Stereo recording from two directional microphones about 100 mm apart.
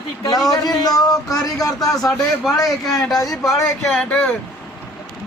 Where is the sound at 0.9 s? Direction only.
40° left (ahead or behind).